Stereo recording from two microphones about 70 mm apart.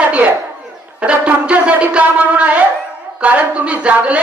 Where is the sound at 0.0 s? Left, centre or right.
Centre.